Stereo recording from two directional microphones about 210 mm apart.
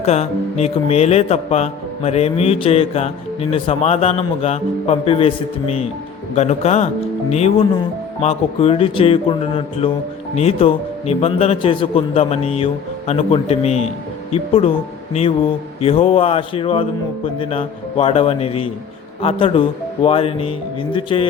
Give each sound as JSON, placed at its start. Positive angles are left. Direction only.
{"t": 0.0, "sound": "a man's voice", "side_deg": 30}